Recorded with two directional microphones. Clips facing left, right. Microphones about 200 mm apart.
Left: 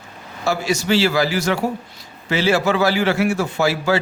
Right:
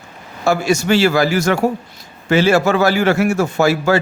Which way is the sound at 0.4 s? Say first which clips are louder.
Right 5 dB; 50° right (ahead or behind).